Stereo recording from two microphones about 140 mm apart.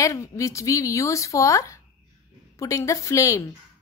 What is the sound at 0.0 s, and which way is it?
A woman's voice, 25° left (ahead or behind).